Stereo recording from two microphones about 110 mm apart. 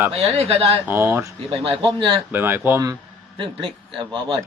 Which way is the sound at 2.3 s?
20° right (ahead or behind).